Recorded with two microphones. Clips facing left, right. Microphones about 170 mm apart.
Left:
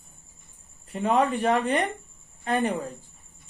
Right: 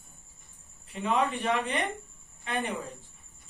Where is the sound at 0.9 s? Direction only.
45° left (ahead or behind).